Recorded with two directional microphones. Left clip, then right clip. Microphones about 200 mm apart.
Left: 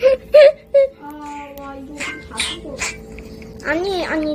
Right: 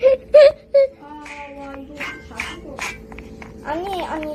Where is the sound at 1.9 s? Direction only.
Centre (ahead or behind).